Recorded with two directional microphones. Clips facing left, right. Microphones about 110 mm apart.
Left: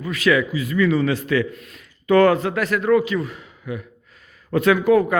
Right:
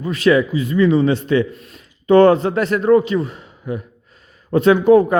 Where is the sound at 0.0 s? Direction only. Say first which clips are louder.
Right 4 dB; 30° right (ahead or behind).